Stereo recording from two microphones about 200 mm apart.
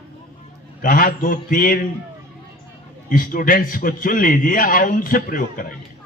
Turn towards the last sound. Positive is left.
turn(degrees=45)  # may be behind; listen again after turning